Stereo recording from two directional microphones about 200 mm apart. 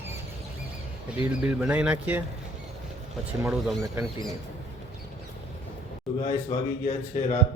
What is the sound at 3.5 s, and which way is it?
Speech, centre (ahead or behind).